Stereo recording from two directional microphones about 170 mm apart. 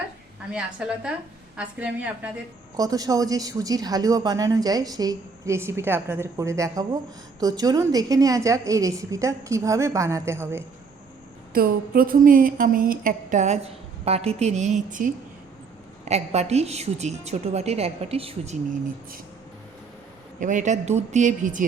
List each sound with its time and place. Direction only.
0.5 s a woman's voice: 5° right (ahead or behind)
2.7 s speech: 20° right (ahead or behind)
11.5 s a woman's voice: 60° right (ahead or behind); by 18.8 s 40° right (ahead or behind)
20.4 s a woman's voice: 50° right (ahead or behind)